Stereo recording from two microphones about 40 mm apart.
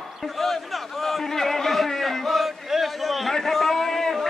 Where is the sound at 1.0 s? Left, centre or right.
Centre.